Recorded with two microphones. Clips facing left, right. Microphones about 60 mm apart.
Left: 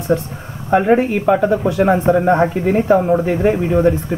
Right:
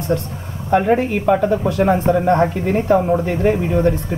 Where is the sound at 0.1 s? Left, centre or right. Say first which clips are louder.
Left 2 dB; centre.